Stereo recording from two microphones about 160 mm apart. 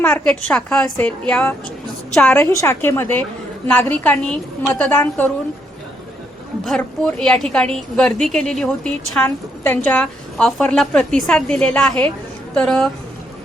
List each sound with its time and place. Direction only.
0.0 s a woman's voice: 5° left (ahead or behind)
6.7 s a woman's voice: 5° left (ahead or behind)